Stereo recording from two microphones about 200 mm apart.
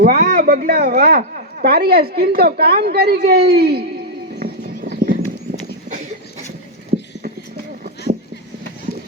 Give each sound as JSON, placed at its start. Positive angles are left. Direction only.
{"t": 0.0, "sound": "speech", "side_deg": -50}
{"t": 4.4, "sound": "clip-clop", "side_deg": -45}